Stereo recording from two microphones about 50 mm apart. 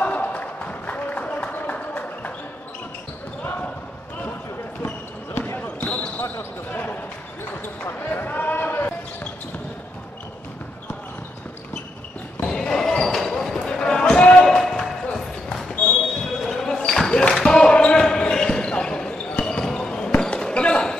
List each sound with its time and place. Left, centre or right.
0.0 s a sound: left
3.4 s basketball bounce: left
4.8 s basketball bounce: left
12.4 s basketball bounce: centre
14.4 s basketball bounce: centre
16.3 s basketball bounce: centre
19.1 s basketball bounce: left
19.4 s basketball bounce: centre